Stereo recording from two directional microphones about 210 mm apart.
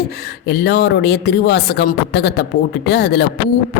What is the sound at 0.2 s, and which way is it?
A woman's voice, 50° left (ahead or behind).